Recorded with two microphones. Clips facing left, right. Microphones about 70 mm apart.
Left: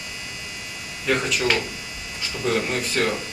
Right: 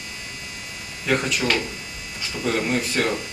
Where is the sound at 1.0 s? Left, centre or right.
Centre.